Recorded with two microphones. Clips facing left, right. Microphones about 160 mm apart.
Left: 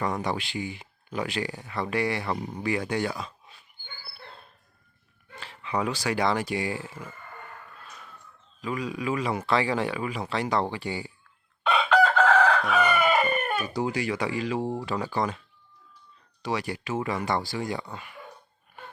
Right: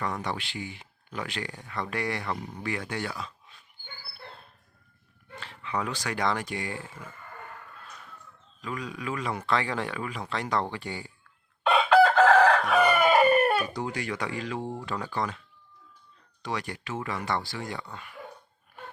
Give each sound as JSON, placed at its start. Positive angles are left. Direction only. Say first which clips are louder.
{"t": 0.0, "sound": "speech", "louder": "left 4 dB", "side_deg": 15}
{"t": 2.3, "sound": "speech", "louder": "left 5 dB", "side_deg": 20}
{"t": 5.4, "sound": "speech", "louder": "left 3 dB", "side_deg": 15}
{"t": 8.6, "sound": "speech", "louder": "left 5 dB", "side_deg": 10}
{"t": 11.7, "sound": "chicken", "louder": "right 2 dB", "side_deg": -10}
{"t": 13.7, "sound": "speech", "louder": "left 4 dB", "side_deg": 5}
{"t": 16.4, "sound": "speech", "louder": "left 4 dB", "side_deg": 5}